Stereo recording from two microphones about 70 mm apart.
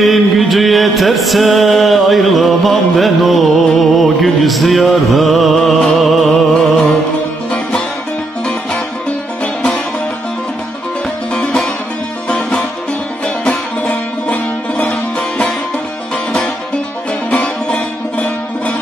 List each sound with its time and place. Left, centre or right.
0.0 s music: centre
9.4 s music: centre
11.3 s music: centre
17.3 s music: centre